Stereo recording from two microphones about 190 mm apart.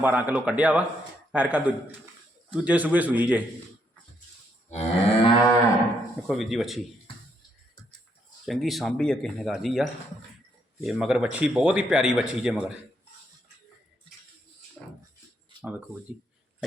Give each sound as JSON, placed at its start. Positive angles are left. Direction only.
{"t": 0.0, "sound": "a man's voice", "side_deg": -10}
{"t": 4.7, "sound": "moo", "side_deg": 35}
{"t": 6.2, "sound": "speech", "side_deg": 0}
{"t": 8.4, "sound": "speech", "side_deg": 0}